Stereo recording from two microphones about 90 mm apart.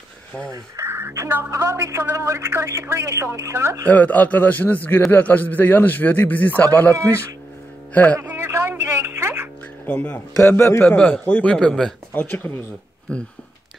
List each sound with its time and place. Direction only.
0.5 s speech: 30° right (ahead or behind)
3.8 s a man's voice: 20° left (ahead or behind)
8.2 s a sound: 25° right (ahead or behind)
9.8 s a man's voice: 15° left (ahead or behind)
10.5 s a man's voice: 30° left (ahead or behind)
10.8 s a man's voice: 15° left (ahead or behind)
12.1 s a man's voice: 20° left (ahead or behind)